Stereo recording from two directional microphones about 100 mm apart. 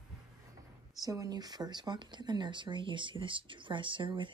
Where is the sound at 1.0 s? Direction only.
35° right (ahead or behind).